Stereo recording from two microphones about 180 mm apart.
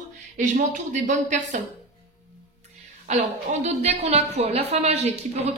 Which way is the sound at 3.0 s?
40° right (ahead or behind).